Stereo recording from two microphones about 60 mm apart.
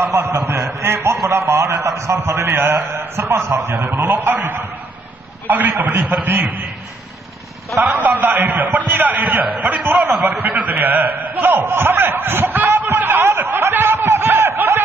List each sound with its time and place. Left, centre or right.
0.0 s a man's voice: right
0.7 s a sound: right
1.2 s a sound: right
2.1 s a man's voice: right
3.8 s a man's voice: right
7.9 s a man's voice: right
12.7 s snicker: right